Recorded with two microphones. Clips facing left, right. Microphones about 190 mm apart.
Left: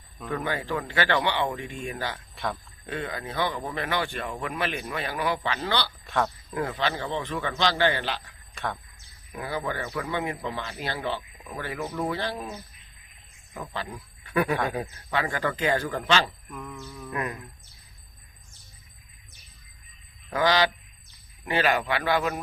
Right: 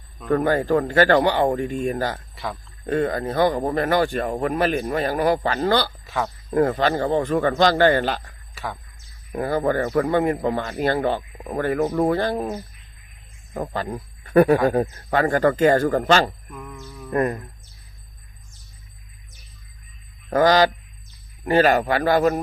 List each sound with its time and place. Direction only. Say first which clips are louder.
0.3 s a man's voice: right 10 dB; 45° right (ahead or behind)
2.3 s a sound: right 1 dB; centre (ahead or behind)
2.8 s a man's voice: right 11 dB; 45° right (ahead or behind)
6.1 s a sound: right 1 dB; centre (ahead or behind)
6.5 s a man's voice: right 9 dB; 45° right (ahead or behind)
8.5 s speech: right 1 dB; 5° right (ahead or behind)
9.3 s a man's voice: right 10 dB; 45° right (ahead or behind)
16.5 s a sound: right 1 dB; centre (ahead or behind)
17.1 s a man's voice: right 11 dB; 45° right (ahead or behind)
20.3 s a man's voice: right 7 dB; 45° right (ahead or behind)